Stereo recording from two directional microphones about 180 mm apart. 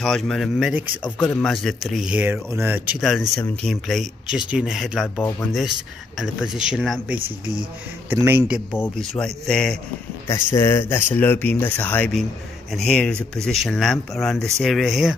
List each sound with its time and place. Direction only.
0.0 s speech: centre (ahead or behind)
3.0 s a man's voice: centre (ahead or behind)
10.2 s speech: 15° left (ahead or behind); by 15.1 s centre (ahead or behind)